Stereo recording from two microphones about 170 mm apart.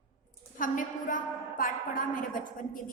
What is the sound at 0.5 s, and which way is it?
A woman's voice, 50° left (ahead or behind).